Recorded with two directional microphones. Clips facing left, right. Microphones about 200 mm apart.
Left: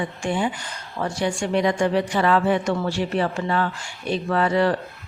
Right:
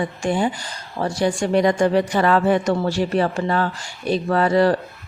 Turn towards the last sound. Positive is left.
turn(degrees=-35)  # may be behind; listen again after turning